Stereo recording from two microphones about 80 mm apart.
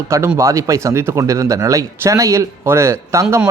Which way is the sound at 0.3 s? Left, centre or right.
Right.